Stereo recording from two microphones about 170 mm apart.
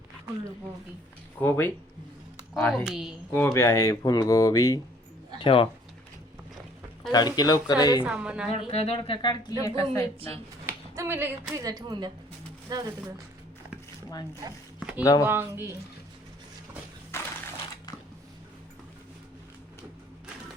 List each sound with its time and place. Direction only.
1.4 s a woman's voice: 10° left (ahead or behind); by 3.2 s 5° right (ahead or behind)
3.3 s speech: 15° left (ahead or behind); by 5.6 s 30° left (ahead or behind)
7.1 s speech: 25° left (ahead or behind)
8.0 s a woman's voice: 5° right (ahead or behind)
8.7 s a woman's voice: 35° left (ahead or behind); by 10.1 s 15° left (ahead or behind)
10.7 s speech: 15° right (ahead or behind)
14.8 s a sound: 5° right (ahead or behind)
15.0 s speech: 20° left (ahead or behind)
15.3 s a woman's voice: 15° right (ahead or behind)
17.1 s a sound: 15° left (ahead or behind)